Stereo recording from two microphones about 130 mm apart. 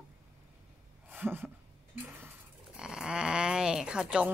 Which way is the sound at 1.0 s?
15° right (ahead or behind).